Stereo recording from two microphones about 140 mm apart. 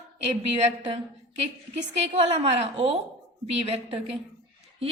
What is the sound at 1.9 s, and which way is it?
A woman's voice, 45° right (ahead or behind).